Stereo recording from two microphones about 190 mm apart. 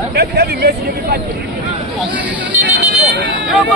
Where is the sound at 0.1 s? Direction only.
55° right (ahead or behind).